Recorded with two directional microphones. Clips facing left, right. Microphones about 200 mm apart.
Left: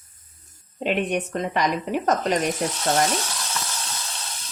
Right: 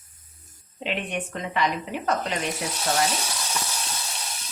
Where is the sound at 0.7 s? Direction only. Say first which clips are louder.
Left 6 dB; 45° left (ahead or behind).